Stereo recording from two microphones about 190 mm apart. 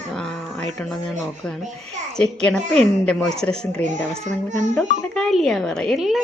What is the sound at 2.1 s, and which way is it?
A woman's voice, 5° left (ahead or behind).